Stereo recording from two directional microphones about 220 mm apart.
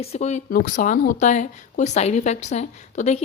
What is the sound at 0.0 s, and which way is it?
Speech, 30° left (ahead or behind).